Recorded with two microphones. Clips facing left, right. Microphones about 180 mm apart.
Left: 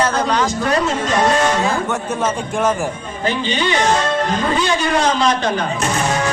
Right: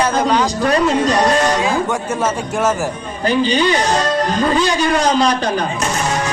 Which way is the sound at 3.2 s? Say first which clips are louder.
Right 5 dB; 40° right (ahead or behind).